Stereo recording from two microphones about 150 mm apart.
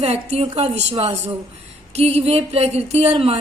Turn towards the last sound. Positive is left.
turn(degrees=-45)  # may be behind; listen again after turning